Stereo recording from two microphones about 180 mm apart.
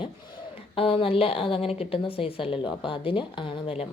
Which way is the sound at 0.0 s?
30° left (ahead or behind).